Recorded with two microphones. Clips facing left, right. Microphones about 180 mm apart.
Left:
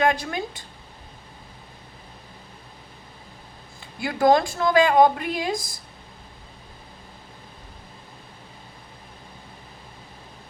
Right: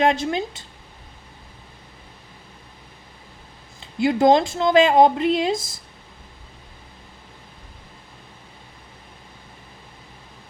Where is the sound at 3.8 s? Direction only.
25° right (ahead or behind).